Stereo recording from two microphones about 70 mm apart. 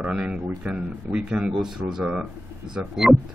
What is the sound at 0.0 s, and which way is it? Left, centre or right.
Speech, centre.